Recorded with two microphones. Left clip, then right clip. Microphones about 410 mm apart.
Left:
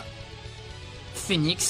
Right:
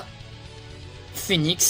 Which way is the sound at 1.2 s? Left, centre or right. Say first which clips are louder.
Right 3 dB; left.